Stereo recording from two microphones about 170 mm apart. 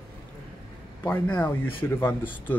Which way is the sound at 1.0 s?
10° left (ahead or behind).